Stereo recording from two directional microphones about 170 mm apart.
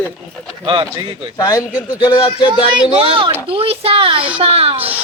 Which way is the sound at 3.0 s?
30° right (ahead or behind).